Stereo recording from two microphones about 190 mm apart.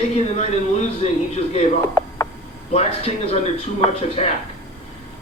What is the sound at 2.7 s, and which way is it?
A man's voice, 30° left (ahead or behind).